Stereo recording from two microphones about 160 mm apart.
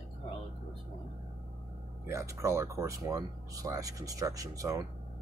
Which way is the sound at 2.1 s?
20° right (ahead or behind).